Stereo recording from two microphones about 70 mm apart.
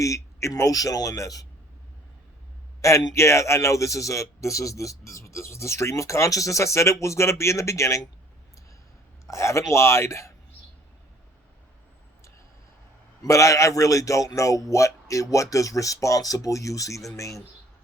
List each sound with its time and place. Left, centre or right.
0.0 s speech: left
2.8 s speech: left
9.2 s speech: left
13.2 s speech: left